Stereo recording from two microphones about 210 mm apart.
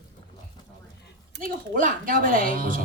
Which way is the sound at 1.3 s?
40° right (ahead or behind).